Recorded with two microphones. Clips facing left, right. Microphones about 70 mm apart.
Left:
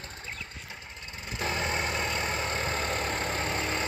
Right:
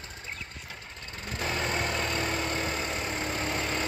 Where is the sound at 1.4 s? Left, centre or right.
Left.